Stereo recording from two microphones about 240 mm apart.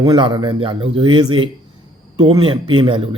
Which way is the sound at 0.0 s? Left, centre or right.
Centre.